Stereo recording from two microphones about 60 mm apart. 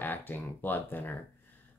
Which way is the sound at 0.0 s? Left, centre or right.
Left.